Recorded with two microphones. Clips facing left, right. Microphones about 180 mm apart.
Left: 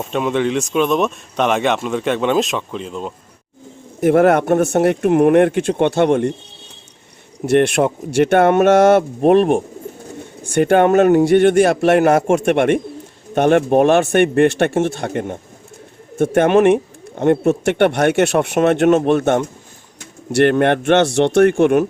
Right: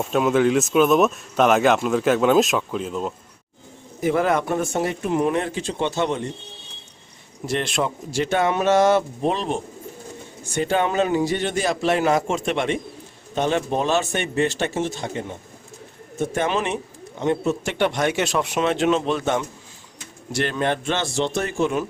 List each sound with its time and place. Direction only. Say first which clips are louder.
0.0 s speech: even; centre (ahead or behind)
4.0 s speech: left 8 dB; 65° left (ahead or behind)
7.5 s speech: left 10 dB; 60° left (ahead or behind)